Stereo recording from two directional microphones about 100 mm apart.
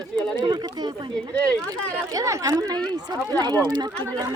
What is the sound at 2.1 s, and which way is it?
Speech, 35° right (ahead or behind).